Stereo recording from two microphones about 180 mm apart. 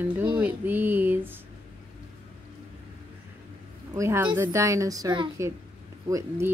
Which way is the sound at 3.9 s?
15° right (ahead or behind).